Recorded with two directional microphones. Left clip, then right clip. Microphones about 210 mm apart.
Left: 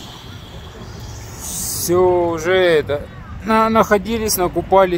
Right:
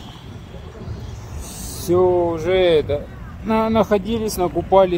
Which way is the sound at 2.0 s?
35° left (ahead or behind).